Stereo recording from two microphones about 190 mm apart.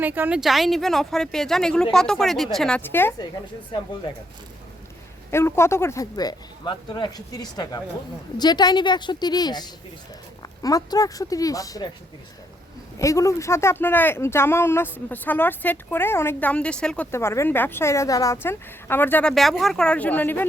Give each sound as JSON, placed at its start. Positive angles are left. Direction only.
{"t": 0.0, "sound": "speech", "side_deg": -10}
{"t": 5.3, "sound": "speech", "side_deg": 15}
{"t": 13.0, "sound": "speech", "side_deg": 15}